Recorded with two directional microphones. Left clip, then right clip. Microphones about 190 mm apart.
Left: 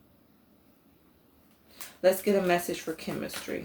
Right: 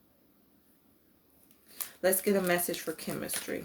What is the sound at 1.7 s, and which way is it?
Speech, 45° right (ahead or behind).